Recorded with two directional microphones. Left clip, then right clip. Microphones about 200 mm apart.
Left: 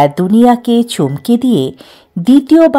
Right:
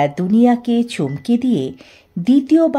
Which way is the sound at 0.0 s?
25° left (ahead or behind).